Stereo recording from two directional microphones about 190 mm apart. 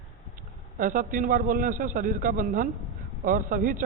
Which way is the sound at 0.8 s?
45° right (ahead or behind).